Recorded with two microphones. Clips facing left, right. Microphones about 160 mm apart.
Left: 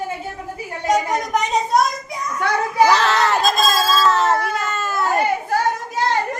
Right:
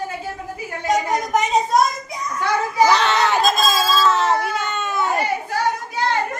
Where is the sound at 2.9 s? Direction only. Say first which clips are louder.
Left 1 dB; centre (ahead or behind).